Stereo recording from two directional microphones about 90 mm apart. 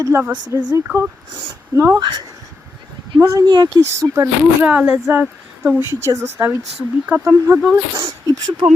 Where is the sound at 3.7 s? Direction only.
35° right (ahead or behind).